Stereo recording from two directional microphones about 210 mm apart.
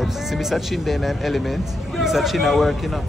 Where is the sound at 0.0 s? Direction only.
Centre (ahead or behind).